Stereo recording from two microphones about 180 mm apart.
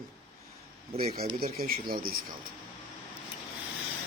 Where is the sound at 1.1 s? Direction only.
55° right (ahead or behind).